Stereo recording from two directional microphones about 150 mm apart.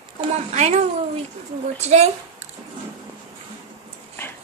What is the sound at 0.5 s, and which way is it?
A woman's voice, 45° right (ahead or behind).